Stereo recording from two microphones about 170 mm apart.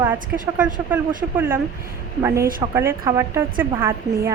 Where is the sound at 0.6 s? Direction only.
10° right (ahead or behind).